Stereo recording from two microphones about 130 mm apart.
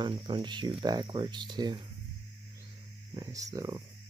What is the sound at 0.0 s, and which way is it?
Speech, 35° right (ahead or behind).